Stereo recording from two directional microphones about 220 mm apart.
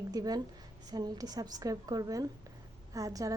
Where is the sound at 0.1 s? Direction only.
15° right (ahead or behind).